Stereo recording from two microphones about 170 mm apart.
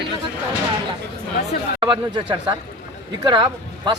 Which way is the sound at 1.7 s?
25° right (ahead or behind).